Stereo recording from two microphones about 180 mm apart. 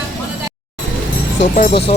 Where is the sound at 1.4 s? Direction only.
45° left (ahead or behind).